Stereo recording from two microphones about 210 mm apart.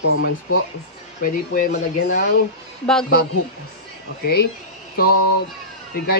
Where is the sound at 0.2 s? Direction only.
80° left.